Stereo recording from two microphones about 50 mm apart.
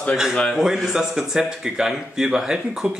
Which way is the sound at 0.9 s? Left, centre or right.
Centre.